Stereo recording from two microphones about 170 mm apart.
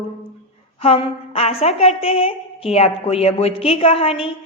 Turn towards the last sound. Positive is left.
turn(degrees=35)  # may be behind; listen again after turning